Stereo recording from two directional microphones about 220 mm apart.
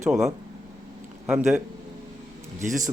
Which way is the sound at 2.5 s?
35° right (ahead or behind).